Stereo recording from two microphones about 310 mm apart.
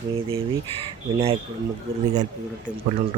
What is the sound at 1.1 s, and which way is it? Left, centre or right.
Speech, centre.